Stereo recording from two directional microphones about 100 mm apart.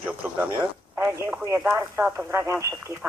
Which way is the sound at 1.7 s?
15° right (ahead or behind).